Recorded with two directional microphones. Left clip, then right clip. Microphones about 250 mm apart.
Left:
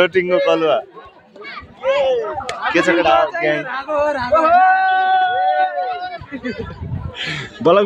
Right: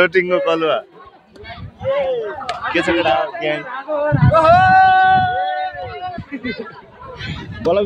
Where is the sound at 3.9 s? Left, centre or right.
Left.